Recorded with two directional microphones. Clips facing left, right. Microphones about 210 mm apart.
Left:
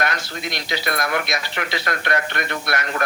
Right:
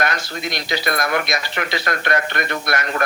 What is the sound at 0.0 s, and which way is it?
Speech, 45° right (ahead or behind).